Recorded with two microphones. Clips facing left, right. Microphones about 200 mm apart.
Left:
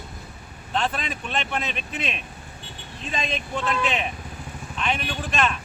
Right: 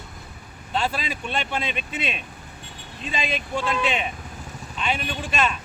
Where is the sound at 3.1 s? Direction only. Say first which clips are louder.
Right 1 dB; 5° right (ahead or behind).